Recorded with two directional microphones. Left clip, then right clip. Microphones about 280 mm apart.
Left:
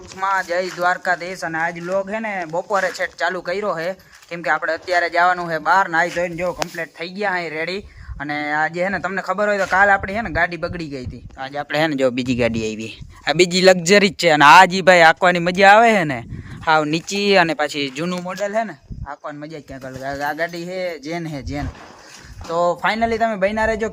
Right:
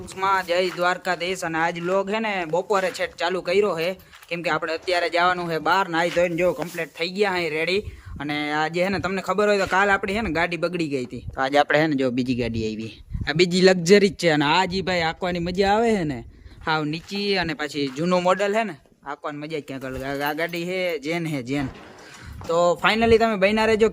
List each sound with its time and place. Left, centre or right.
0.2 s speech: centre
6.1 s speech: centre
11.4 s speech: centre
11.9 s speech: centre
18.3 s speech: centre
22.4 s speech: centre